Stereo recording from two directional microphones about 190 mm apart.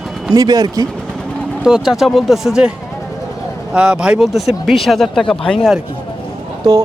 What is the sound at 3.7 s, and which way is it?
Speech, 5° right (ahead or behind).